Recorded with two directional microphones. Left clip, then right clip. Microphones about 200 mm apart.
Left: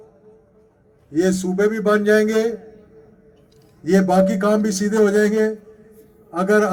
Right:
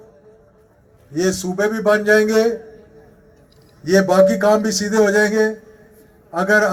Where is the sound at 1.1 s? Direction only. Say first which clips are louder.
Left 1 dB; 40° left (ahead or behind).